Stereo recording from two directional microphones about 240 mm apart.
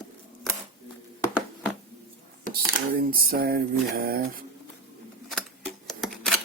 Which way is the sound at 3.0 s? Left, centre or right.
Right.